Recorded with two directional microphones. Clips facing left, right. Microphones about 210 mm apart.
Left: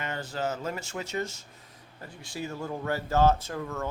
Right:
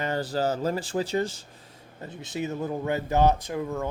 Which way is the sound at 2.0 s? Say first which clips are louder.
Right 5 dB; 20° right (ahead or behind).